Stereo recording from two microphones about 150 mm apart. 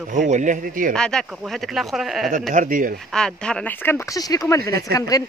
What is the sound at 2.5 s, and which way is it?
Speech, 65° right (ahead or behind).